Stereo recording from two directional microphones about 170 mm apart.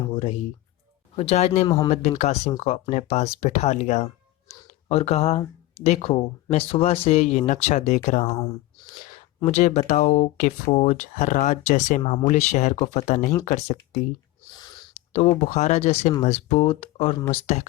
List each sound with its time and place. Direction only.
0.1 s music: 30° left (ahead or behind)
1.1 s speech: 35° left (ahead or behind)
1.6 s speech: 20° left (ahead or behind)
1.9 s speech: 40° left (ahead or behind)
8.3 s speech: 20° left (ahead or behind)
9.4 s speech: 40° left (ahead or behind)
15.1 s speech: 40° left (ahead or behind)